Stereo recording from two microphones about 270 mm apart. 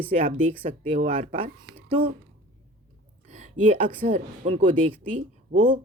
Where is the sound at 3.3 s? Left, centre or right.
Right.